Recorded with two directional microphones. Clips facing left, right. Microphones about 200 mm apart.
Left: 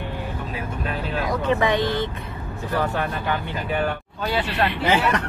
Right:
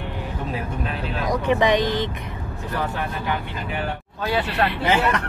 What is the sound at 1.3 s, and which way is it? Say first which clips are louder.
Speech: right 2 dB; 15° right (ahead or behind).